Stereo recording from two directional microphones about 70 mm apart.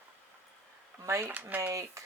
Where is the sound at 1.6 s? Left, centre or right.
Right.